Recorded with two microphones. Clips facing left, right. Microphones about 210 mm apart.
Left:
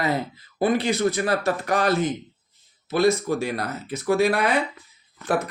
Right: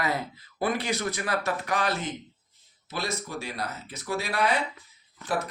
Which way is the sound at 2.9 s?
50° left (ahead or behind).